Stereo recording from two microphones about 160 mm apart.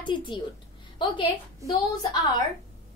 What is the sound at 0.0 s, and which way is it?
A woman's voice, 30° left (ahead or behind).